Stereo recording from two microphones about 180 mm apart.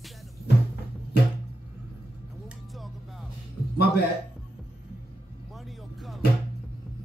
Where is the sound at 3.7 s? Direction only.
65° left (ahead or behind).